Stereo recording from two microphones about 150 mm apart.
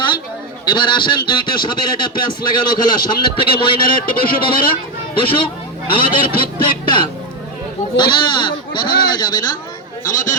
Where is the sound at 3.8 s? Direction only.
75° left (ahead or behind).